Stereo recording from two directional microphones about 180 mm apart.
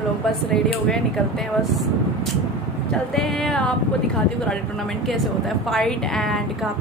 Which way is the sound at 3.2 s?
Centre (ahead or behind).